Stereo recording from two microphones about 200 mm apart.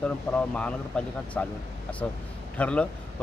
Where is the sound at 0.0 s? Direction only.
5° left (ahead or behind).